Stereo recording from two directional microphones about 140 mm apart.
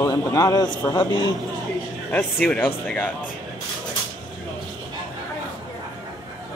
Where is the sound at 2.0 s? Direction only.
10° left (ahead or behind).